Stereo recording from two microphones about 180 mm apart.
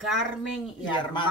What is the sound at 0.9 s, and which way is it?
Speech, 25° left (ahead or behind).